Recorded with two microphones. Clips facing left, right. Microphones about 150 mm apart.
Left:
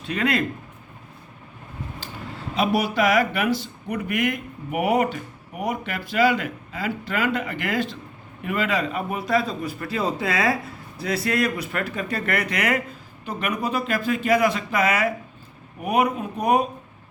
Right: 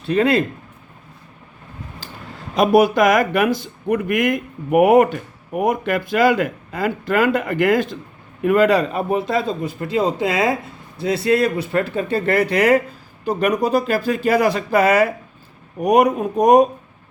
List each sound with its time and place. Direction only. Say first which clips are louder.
0.0 s a man's voice: right 7 dB; 35° right (ahead or behind)
2.6 s a man's voice: right 8 dB; 45° right (ahead or behind)